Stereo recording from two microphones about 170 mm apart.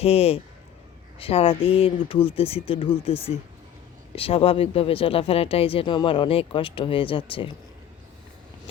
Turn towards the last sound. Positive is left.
turn(degrees=30)  # may be behind; listen again after turning